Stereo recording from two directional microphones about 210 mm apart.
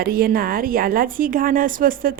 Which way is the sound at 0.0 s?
45° right (ahead or behind).